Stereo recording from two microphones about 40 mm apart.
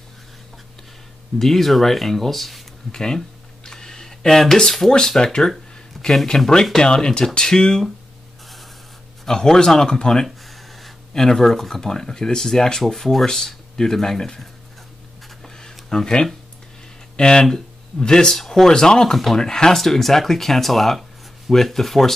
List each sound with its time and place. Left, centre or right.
1.4 s speech: centre
2.9 s speech: centre
3.6 s a sound: centre
5.2 s speech: centre
9.3 s speech: centre
10.2 s a sound: centre
11.1 s speech: centre
15.4 s a sound: centre
15.9 s speech: centre
18.4 s speech: centre
18.7 s speech: centre